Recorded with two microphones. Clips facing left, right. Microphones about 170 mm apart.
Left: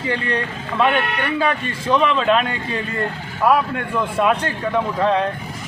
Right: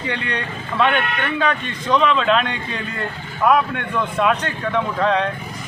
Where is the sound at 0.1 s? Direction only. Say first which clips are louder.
Left 4 dB; 35° left (ahead or behind).